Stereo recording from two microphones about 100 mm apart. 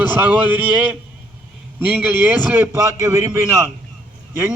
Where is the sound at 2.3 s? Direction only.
20° right (ahead or behind).